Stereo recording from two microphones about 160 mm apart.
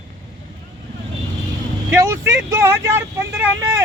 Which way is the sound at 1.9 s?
20° right (ahead or behind).